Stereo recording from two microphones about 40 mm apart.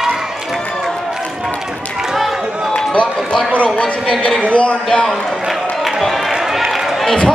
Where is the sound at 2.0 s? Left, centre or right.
Centre.